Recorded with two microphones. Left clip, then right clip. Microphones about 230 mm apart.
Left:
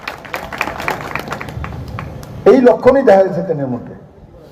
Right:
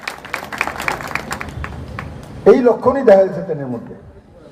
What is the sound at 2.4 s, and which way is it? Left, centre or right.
A man's voice, left.